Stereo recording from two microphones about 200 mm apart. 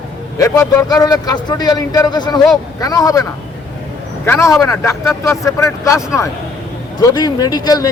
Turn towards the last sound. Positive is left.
turn(degrees=20)  # may be behind; listen again after turning